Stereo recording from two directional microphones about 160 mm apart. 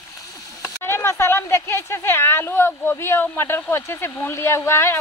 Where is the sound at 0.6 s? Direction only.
15° left (ahead or behind).